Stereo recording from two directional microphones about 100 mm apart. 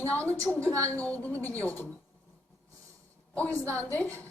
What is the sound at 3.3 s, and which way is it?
Speech, 15° left (ahead or behind).